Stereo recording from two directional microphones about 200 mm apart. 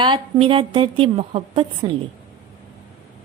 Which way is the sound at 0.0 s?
25° right (ahead or behind).